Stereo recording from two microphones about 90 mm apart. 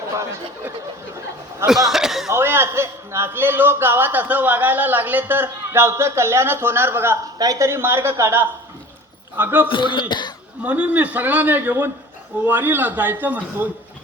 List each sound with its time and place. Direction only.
1.6 s speech: 5° right (ahead or behind)
2.3 s a man's voice: 25° right (ahead or behind)
7.3 s a man's voice: 40° right (ahead or behind); by 9.6 s 20° right (ahead or behind)
9.6 s speech: 65° left (ahead or behind)
10.6 s a man's voice: 15° right (ahead or behind)